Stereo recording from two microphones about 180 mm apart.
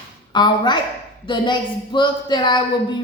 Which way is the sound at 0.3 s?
25° left (ahead or behind).